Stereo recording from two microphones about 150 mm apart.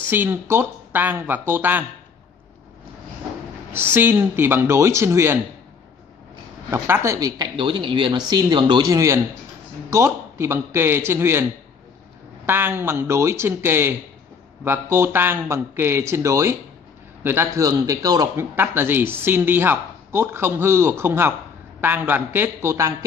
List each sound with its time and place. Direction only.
0.1 s a man's voice: 15° right (ahead or behind)
3.7 s a man's voice: 15° right (ahead or behind)
6.7 s a man's voice: 20° right (ahead or behind)
12.4 s a man's voice: 15° right (ahead or behind)